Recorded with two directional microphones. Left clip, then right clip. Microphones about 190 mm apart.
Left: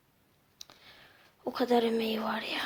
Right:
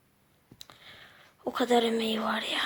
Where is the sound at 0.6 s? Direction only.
5° right (ahead or behind).